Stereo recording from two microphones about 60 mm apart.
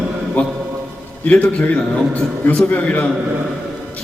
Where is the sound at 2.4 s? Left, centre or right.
Left.